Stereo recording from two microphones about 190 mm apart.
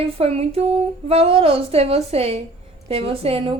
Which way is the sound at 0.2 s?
30° right (ahead or behind).